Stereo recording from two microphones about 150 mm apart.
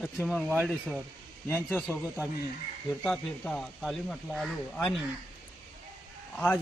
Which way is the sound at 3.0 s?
5° left (ahead or behind).